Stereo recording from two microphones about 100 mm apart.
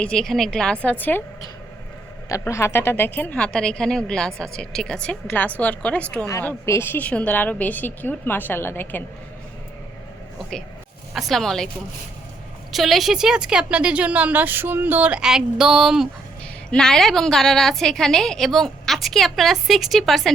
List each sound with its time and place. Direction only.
0.0 s a woman's voice: 5° left (ahead or behind)
2.4 s a woman's voice: 30° left (ahead or behind); by 6.2 s 10° left (ahead or behind)
6.7 s a woman's voice: 25° left (ahead or behind)
11.1 s a woman's voice: centre (ahead or behind)
12.7 s speech: centre (ahead or behind)
16.6 s a woman's voice: 5° left (ahead or behind)